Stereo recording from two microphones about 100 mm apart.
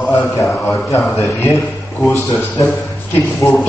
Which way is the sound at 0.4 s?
30° left (ahead or behind).